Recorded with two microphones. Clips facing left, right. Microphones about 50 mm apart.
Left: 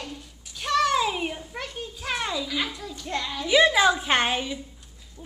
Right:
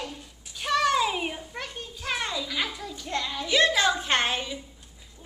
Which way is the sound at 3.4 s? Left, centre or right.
Centre.